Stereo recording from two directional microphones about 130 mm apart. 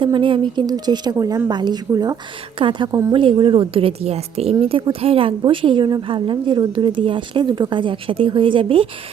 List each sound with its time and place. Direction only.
0.0 s a woman's voice: 40° right (ahead or behind)